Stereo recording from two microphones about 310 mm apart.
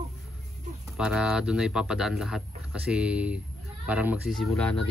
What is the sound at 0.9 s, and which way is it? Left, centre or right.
Speech, centre.